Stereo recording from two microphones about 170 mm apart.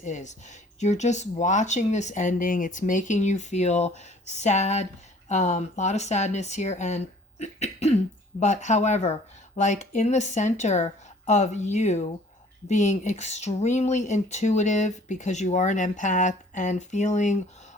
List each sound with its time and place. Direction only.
0.0 s a woman's voice: 45° left (ahead or behind)